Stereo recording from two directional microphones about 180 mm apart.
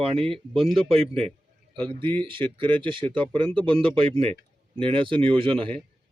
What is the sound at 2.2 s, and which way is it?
A man's voice, 30° right (ahead or behind).